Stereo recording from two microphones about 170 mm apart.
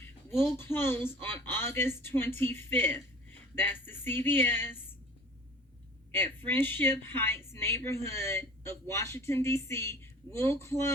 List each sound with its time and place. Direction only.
0.0 s a sound: 15° left (ahead or behind)
0.6 s a woman's voice: 15° left (ahead or behind)
6.1 s a woman's voice: 10° left (ahead or behind)